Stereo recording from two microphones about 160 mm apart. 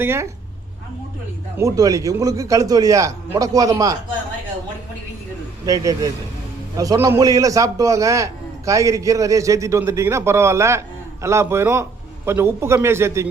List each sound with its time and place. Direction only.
0.0 s a man's voice: 15° right (ahead or behind)
1.5 s a man's voice: 20° right (ahead or behind)
5.6 s a man's voice: 20° right (ahead or behind)